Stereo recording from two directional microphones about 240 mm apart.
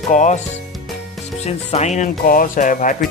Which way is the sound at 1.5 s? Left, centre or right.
Left.